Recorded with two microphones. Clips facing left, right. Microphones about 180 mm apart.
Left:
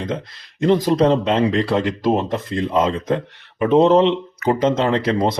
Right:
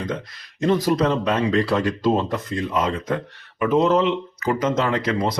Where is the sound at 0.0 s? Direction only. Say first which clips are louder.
Left 2 dB; 25° left (ahead or behind).